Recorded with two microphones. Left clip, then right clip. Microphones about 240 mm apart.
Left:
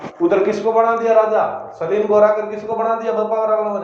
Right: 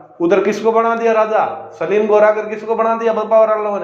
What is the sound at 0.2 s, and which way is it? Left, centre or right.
A man's voice, right.